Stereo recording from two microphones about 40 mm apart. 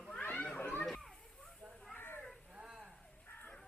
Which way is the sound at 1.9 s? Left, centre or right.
Left.